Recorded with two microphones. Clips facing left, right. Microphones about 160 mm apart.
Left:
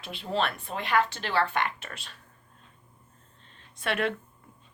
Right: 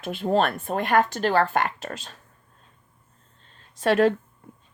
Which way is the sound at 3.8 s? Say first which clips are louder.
Right 10 dB; 35° right (ahead or behind).